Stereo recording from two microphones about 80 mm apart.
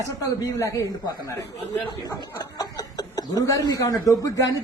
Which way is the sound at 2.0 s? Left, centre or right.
Left.